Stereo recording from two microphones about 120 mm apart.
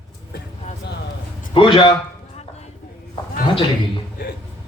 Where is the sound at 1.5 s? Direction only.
45° left (ahead or behind).